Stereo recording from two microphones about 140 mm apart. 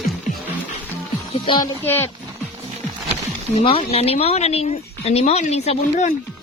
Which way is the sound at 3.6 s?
40° left (ahead or behind).